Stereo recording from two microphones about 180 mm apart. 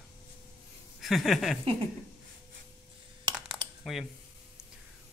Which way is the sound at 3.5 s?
Centre (ahead or behind).